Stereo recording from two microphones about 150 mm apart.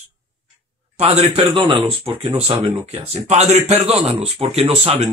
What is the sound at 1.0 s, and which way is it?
A man's voice, 40° right (ahead or behind).